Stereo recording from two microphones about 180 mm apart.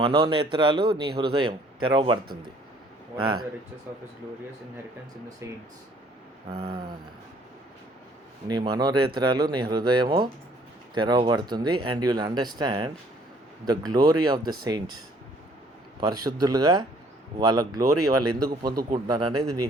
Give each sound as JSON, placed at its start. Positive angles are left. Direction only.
{"t": 0.0, "sound": "a man's voice", "side_deg": -30}
{"t": 3.2, "sound": "a man's voice", "side_deg": -25}
{"t": 5.4, "sound": "speech", "side_deg": -15}
{"t": 6.5, "sound": "a sound", "side_deg": -35}
{"t": 8.4, "sound": "a man's voice", "side_deg": -25}
{"t": 18.7, "sound": "a man's voice", "side_deg": -55}
{"t": 19.0, "sound": "a man's voice", "side_deg": -20}